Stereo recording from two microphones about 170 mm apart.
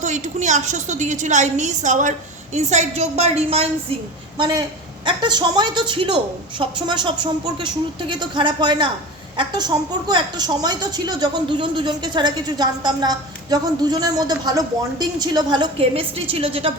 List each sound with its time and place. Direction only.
0.0 s a woman's voice: 45° right (ahead or behind)
4.4 s a woman's voice: 25° right (ahead or behind)